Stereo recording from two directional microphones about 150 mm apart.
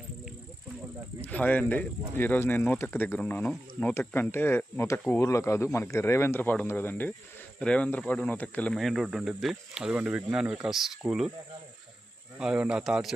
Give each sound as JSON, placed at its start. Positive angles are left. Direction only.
{"t": 1.2, "sound": "speech", "side_deg": 10}
{"t": 12.4, "sound": "speech", "side_deg": -5}